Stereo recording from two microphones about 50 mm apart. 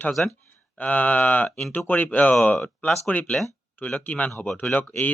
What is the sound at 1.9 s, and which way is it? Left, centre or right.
Speech, left.